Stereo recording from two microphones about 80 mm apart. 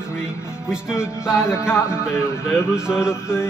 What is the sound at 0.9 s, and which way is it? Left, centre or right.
Music, left.